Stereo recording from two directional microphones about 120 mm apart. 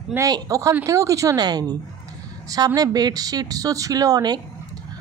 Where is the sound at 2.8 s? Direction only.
30° right (ahead or behind).